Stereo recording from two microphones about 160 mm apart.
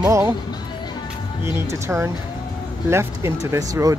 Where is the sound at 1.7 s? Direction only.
15° right (ahead or behind).